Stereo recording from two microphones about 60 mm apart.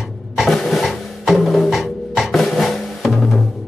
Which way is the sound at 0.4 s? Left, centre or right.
Centre.